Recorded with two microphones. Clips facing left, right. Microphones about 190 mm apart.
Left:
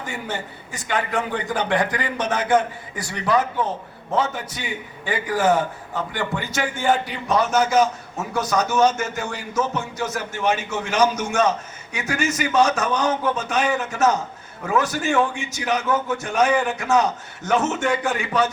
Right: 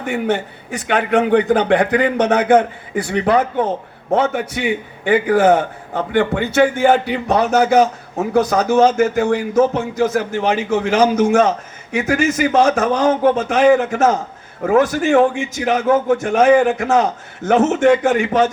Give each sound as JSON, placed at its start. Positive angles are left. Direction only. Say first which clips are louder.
{"t": 0.0, "sound": "a man's voice", "louder": "right 10 dB", "side_deg": -60}
{"t": 15.1, "sound": "a man's voice", "louder": "right 8 dB", "side_deg": -75}
{"t": 15.6, "sound": "a man's voice", "louder": "right 7 dB", "side_deg": -50}